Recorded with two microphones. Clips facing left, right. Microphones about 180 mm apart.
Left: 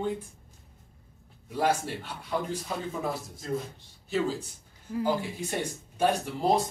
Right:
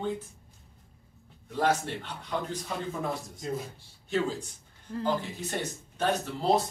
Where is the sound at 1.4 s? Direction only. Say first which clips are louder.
Even; 10° left (ahead or behind).